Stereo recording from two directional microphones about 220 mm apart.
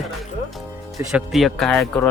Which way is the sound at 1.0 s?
5° right (ahead or behind).